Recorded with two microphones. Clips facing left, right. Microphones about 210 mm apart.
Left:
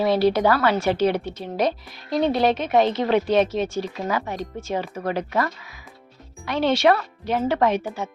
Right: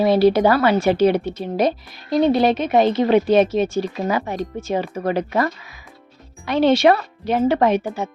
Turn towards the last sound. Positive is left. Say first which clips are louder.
# right 4 dB
turn(degrees=-15)  # may be behind; listen again after turning